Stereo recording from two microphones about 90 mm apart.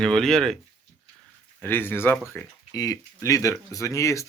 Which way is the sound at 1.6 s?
25° left (ahead or behind).